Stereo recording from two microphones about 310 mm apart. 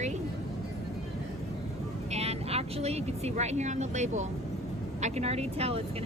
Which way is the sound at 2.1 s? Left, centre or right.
Centre.